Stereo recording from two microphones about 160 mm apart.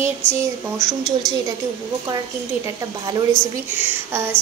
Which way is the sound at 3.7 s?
15° right (ahead or behind).